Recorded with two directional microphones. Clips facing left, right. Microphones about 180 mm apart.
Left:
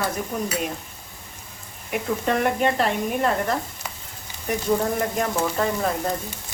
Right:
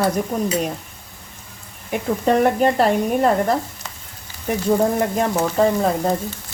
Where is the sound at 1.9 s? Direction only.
35° right (ahead or behind).